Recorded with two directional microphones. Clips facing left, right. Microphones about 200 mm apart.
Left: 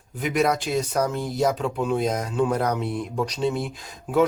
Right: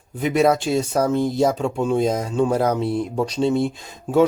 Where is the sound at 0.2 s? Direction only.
30° right (ahead or behind).